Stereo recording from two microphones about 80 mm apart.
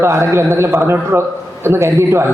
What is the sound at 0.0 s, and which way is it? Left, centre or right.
A man's voice, right.